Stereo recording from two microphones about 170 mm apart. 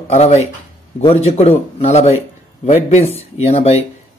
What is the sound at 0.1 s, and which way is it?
A man's voice, 40° left (ahead or behind).